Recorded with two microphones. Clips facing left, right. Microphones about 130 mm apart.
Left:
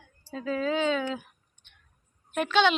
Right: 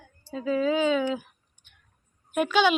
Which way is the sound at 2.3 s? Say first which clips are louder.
Right 1 dB; 5° right (ahead or behind).